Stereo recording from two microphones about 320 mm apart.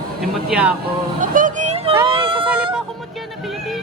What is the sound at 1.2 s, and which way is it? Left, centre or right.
Vehicle, right.